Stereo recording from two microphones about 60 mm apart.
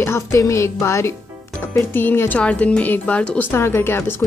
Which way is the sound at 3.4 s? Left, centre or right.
Left.